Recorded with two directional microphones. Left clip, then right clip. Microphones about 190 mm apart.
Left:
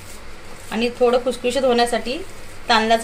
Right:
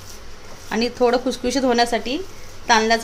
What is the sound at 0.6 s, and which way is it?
Speech, 45° right (ahead or behind).